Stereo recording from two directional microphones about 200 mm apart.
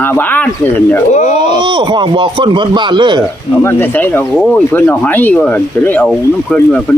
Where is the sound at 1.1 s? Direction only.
35° left (ahead or behind).